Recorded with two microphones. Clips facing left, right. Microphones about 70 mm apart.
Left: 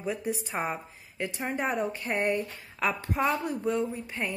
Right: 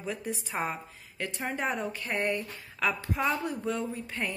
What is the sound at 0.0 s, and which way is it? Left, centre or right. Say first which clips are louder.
A woman's voice: left 4 dB; centre.